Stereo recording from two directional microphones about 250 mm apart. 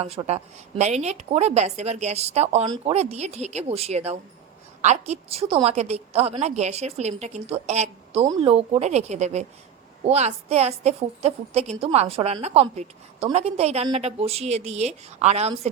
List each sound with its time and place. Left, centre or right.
0.0 s a woman's voice: right